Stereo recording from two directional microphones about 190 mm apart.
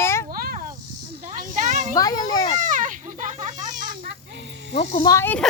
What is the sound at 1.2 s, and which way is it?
Snake, 45° right (ahead or behind).